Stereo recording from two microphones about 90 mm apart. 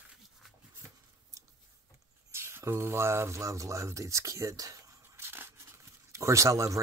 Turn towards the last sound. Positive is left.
turn(degrees=-35)  # may be behind; listen again after turning